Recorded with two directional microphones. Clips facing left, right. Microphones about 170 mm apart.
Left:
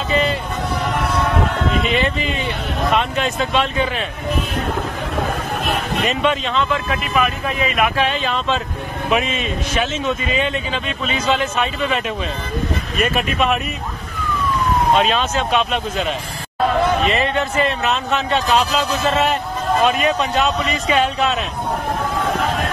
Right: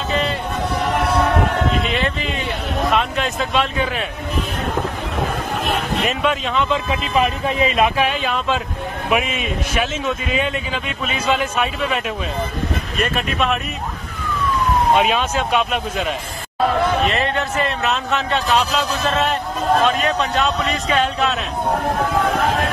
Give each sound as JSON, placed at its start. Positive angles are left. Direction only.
{"t": 0.1, "sound": "vehicle", "side_deg": 5}
{"t": 1.9, "sound": "a man's voice", "side_deg": 0}
{"t": 6.0, "sound": "a man's voice", "side_deg": -5}
{"t": 6.7, "sound": "speech", "side_deg": -25}
{"t": 7.9, "sound": "a man's voice", "side_deg": -10}
{"t": 13.0, "sound": "a man's voice", "side_deg": 5}
{"t": 15.0, "sound": "speech", "side_deg": -10}
{"t": 17.1, "sound": "a man's voice", "side_deg": 0}